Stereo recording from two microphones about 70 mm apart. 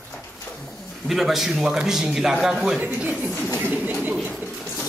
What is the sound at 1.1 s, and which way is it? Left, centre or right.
A man's voice, centre.